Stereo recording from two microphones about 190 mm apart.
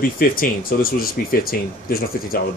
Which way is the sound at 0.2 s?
50° left (ahead or behind).